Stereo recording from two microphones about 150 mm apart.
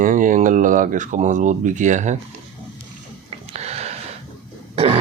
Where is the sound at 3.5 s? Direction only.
45° right (ahead or behind).